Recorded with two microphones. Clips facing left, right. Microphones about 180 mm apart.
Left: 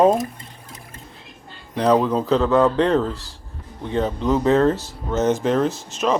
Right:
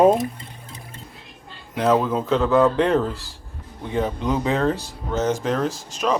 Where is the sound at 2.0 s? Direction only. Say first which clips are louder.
Left 2 dB; centre (ahead or behind).